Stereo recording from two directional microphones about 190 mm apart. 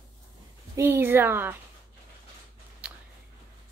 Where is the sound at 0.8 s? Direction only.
10° right (ahead or behind).